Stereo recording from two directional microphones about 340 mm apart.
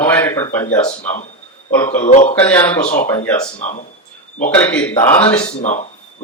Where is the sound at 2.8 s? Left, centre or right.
Centre.